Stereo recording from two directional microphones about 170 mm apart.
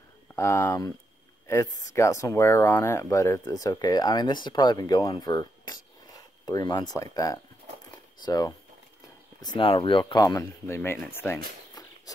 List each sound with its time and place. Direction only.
0.4 s speech: 15° left (ahead or behind)